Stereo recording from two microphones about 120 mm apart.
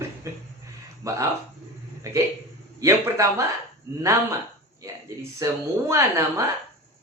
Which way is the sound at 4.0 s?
25° right (ahead or behind).